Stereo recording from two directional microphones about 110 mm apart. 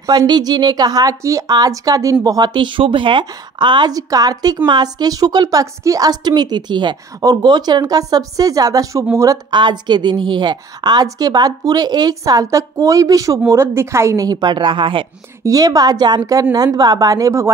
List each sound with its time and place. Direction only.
0.0 s a woman's voice: 35° right (ahead or behind)
9.5 s a woman's voice: 45° right (ahead or behind)
15.4 s a woman's voice: 35° right (ahead or behind)